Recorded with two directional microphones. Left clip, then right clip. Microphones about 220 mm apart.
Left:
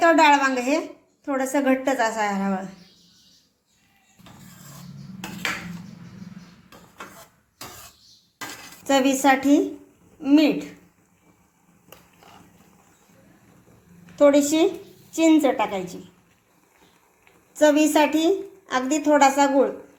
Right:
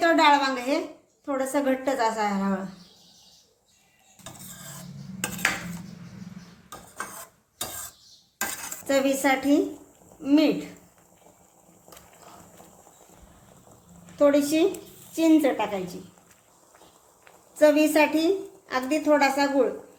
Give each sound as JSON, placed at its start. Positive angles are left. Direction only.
{"t": 0.0, "sound": "a sound", "side_deg": 15}
{"t": 1.2, "sound": "a woman's voice", "side_deg": 15}
{"t": 8.9, "sound": "a woman's voice", "side_deg": 15}
{"t": 14.2, "sound": "a woman's voice", "side_deg": 15}
{"t": 17.6, "sound": "a woman's voice", "side_deg": 15}